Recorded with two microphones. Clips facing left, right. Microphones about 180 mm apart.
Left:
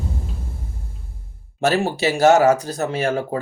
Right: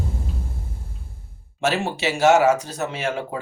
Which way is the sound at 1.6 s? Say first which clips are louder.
Left 4 dB; 40° left (ahead or behind).